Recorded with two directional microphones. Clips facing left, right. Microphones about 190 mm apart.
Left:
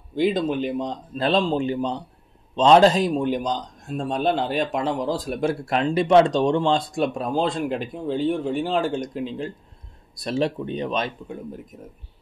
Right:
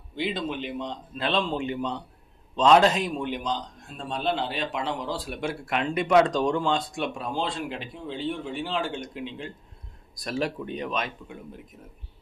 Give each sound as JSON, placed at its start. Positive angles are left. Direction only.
{"t": 0.1, "sound": "a man's voice", "side_deg": 45}
{"t": 10.1, "sound": "speech", "side_deg": 25}